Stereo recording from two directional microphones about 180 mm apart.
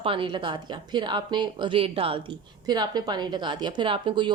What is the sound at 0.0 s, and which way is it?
A woman's voice, 30° right (ahead or behind).